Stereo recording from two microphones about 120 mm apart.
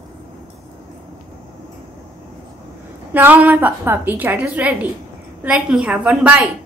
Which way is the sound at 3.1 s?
15° right (ahead or behind).